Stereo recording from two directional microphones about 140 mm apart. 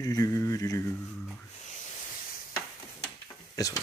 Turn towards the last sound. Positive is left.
turn(degrees=25)  # may be behind; listen again after turning